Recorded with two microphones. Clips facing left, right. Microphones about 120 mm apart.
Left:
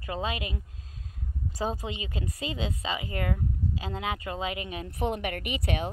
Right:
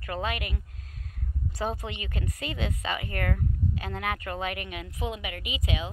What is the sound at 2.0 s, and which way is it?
Speech, 25° left (ahead or behind).